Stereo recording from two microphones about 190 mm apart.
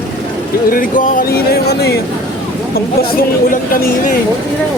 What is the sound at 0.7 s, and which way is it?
Speech, 45° left (ahead or behind).